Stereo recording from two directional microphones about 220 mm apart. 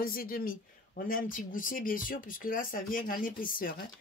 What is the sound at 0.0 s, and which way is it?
Speech, 40° left (ahead or behind).